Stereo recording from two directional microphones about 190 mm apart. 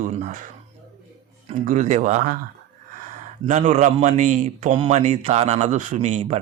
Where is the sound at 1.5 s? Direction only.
40° right (ahead or behind).